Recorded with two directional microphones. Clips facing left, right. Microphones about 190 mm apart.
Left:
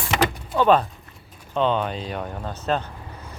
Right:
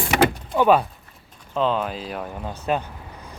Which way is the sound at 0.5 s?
10° right (ahead or behind).